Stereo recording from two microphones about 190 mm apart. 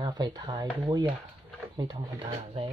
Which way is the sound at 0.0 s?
20° right (ahead or behind).